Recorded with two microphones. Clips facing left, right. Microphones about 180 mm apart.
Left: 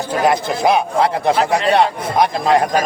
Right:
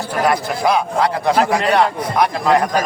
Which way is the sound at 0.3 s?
25° left (ahead or behind).